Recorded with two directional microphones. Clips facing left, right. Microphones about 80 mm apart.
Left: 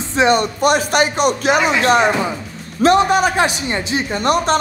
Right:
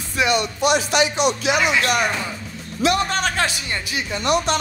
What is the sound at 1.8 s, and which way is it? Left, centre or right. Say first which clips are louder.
Speech: left 6 dB; left.